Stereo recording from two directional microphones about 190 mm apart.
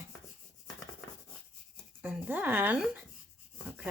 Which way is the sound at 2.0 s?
10° right (ahead or behind).